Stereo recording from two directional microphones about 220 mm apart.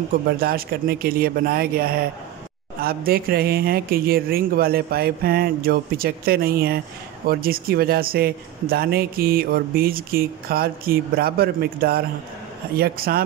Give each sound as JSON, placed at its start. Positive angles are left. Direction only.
{"t": 0.1, "sound": "a man's voice", "side_deg": -40}